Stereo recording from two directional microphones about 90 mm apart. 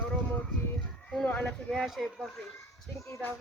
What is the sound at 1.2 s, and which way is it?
Speech, 20° left (ahead or behind).